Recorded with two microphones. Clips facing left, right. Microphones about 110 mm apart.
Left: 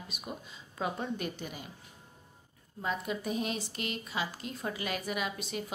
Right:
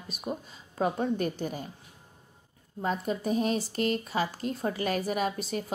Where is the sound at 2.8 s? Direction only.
40° right (ahead or behind).